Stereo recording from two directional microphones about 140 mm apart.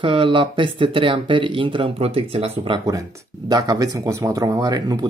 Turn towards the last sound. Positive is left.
turn(degrees=-30)  # may be behind; listen again after turning